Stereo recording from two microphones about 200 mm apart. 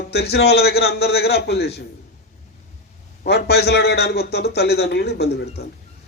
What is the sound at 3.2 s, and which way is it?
A man's voice, 55° left (ahead or behind).